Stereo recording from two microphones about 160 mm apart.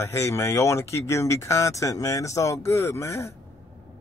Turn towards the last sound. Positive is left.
turn(degrees=20)  # may be behind; listen again after turning